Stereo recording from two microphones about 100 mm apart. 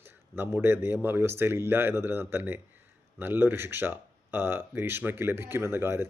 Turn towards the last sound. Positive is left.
turn(degrees=-25)  # may be behind; listen again after turning